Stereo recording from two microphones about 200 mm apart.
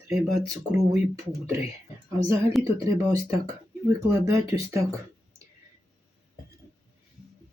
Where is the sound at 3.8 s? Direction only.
15° right (ahead or behind).